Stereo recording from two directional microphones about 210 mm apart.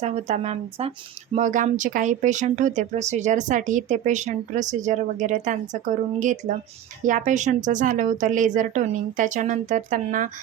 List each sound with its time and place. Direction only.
0.0 s speech: 30° right (ahead or behind)